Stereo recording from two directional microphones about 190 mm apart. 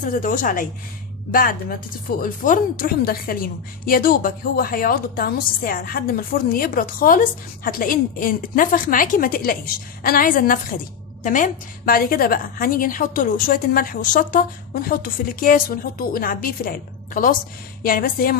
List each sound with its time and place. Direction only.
0.0 s a woman's voice: 45° left (ahead or behind)
17.8 s a woman's voice: 50° left (ahead or behind)